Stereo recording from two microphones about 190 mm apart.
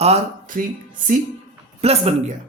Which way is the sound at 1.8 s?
35° right (ahead or behind).